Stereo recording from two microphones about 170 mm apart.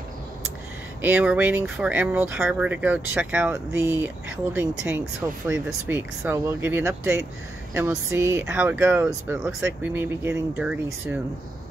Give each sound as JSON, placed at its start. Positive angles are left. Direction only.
{"t": 1.0, "sound": "speech", "side_deg": -10}